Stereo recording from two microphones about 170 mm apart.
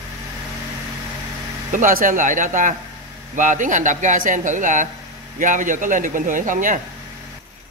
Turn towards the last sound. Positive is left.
turn(degrees=-50)  # may be behind; listen again after turning